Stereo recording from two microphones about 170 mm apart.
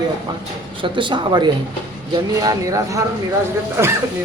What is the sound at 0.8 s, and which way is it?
A man's voice, 30° right (ahead or behind).